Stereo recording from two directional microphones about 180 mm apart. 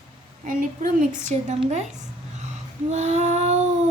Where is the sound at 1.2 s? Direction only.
40° right (ahead or behind).